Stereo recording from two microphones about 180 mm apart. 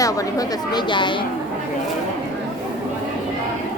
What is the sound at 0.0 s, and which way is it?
A woman's voice, 20° left (ahead or behind).